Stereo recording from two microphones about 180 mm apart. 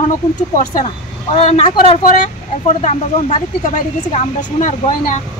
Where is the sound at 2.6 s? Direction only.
40° left (ahead or behind).